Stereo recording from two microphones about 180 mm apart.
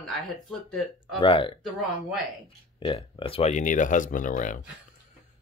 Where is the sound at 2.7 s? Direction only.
30° left (ahead or behind); by 4.6 s 45° left (ahead or behind).